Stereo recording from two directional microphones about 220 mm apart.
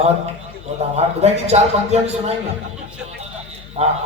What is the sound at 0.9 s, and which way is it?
A man's voice, 30° right (ahead or behind).